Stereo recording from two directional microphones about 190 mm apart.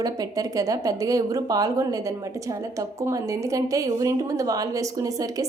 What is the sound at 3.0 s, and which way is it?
A woman's voice, 15° right (ahead or behind).